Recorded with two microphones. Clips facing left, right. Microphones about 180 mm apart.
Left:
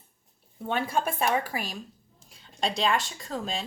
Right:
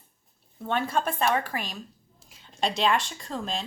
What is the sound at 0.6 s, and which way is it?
A woman's voice, 10° left (ahead or behind).